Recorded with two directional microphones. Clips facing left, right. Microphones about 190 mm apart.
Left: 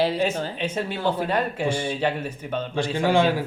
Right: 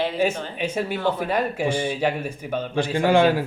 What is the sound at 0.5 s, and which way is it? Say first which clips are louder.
Speech: right 2 dB; 10° right (ahead or behind).